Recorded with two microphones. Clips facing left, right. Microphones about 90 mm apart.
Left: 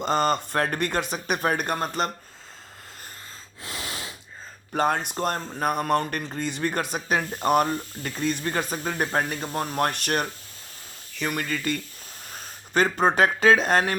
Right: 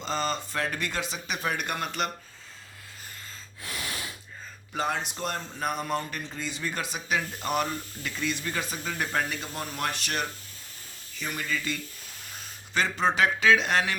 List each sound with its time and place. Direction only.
0.0 s speech: 55° left (ahead or behind); by 2.0 s 40° left (ahead or behind)
3.6 s gasp: 25° left (ahead or behind)
4.7 s speech: 45° left (ahead or behind)